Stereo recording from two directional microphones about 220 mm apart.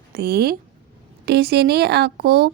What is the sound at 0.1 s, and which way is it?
A woman's voice, 45° right (ahead or behind).